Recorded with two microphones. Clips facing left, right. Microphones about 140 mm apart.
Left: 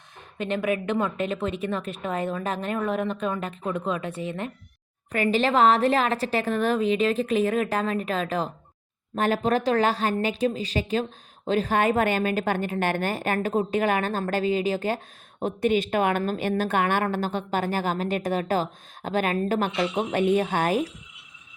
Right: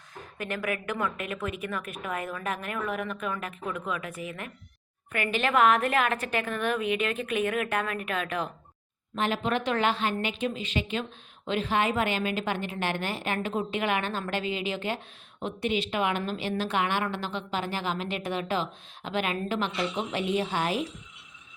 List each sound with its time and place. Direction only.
0.3 s a woman's voice: 25° left (ahead or behind)
9.1 s a woman's voice: 45° left (ahead or behind)